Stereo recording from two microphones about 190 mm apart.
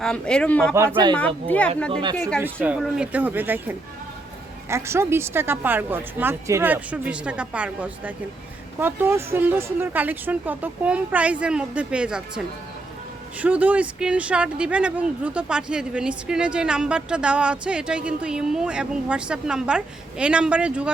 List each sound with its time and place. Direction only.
0.0 s speech: 5° left (ahead or behind)
1.9 s speech: 25° right (ahead or behind)
2.4 s speech: 10° right (ahead or behind)
13.4 s speech: 5° right (ahead or behind)